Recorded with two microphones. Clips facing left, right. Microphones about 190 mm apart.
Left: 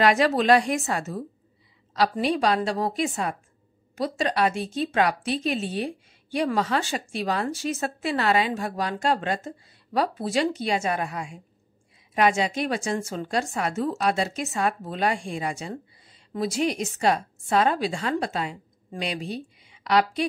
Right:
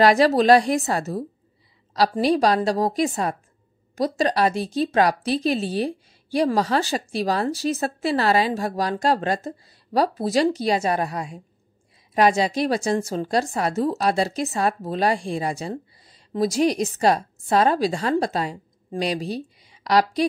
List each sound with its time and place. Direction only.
0.0 s a woman's voice: 35° right (ahead or behind)